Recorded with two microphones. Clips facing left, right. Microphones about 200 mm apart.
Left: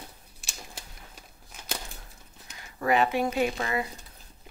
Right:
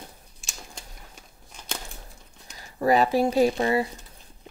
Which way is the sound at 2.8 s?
35° right (ahead or behind).